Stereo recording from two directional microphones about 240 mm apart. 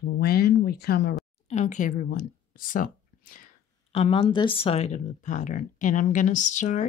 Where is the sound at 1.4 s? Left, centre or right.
Left.